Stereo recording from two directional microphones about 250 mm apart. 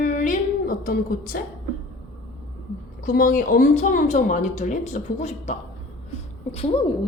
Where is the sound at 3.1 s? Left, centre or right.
Left.